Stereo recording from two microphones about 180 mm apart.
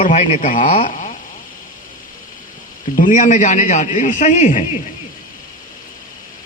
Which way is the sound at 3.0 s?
45° left (ahead or behind).